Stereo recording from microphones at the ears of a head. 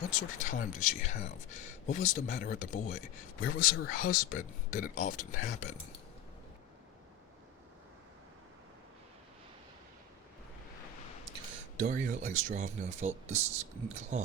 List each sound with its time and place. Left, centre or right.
0.0 s speech: left
10.8 s a sound: left
11.3 s speech: right